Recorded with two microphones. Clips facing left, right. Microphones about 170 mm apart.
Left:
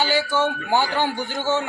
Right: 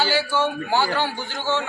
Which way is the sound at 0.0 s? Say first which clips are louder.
Left 1 dB; 15° left (ahead or behind).